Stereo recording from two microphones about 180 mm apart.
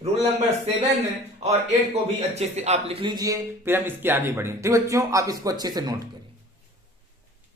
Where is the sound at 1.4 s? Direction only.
35° right (ahead or behind); by 6.1 s 20° right (ahead or behind).